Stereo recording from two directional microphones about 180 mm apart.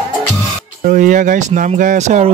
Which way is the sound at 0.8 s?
45° right (ahead or behind).